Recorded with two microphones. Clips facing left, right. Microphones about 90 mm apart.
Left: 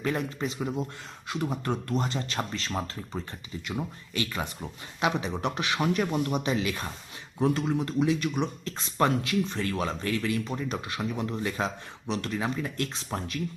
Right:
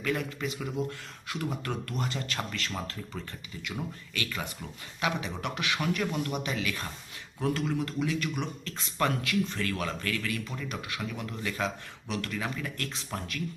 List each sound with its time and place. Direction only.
0.0 s speech: 30° left (ahead or behind)